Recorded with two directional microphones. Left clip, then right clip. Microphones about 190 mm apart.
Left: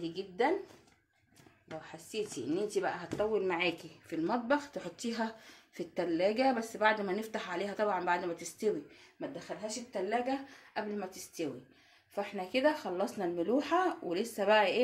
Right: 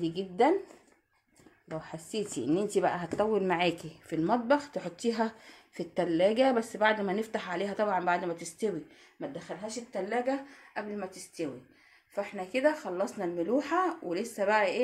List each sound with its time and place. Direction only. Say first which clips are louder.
0.0 s speech: right 6 dB; 70° right (ahead or behind)
1.8 s a woman's voice: right 3 dB; 75° right (ahead or behind)
4.2 s speech: right 5 dB; 35° right (ahead or behind); by 10.4 s 15° right (ahead or behind)
10.7 s speech: right 1 dB; centre (ahead or behind)